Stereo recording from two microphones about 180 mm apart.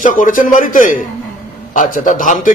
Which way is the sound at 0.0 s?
45° left (ahead or behind).